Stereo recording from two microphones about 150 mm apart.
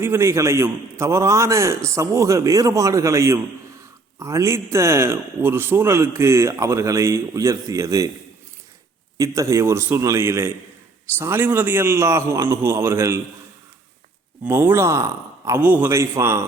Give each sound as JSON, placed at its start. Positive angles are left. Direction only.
{"t": 0.0, "sound": "a man's voice", "side_deg": -20}
{"t": 9.1, "sound": "a man's voice", "side_deg": -20}
{"t": 14.4, "sound": "speech", "side_deg": -15}